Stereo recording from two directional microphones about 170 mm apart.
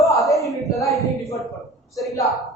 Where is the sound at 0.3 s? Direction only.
Centre (ahead or behind).